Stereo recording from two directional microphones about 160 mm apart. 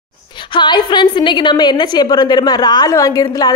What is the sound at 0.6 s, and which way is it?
A woman's voice, 30° left (ahead or behind).